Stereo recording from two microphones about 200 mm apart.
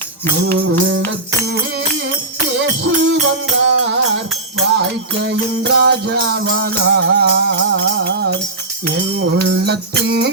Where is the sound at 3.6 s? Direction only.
60° right (ahead or behind).